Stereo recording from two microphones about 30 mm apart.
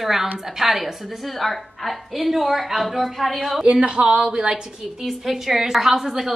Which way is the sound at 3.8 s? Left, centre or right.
Right.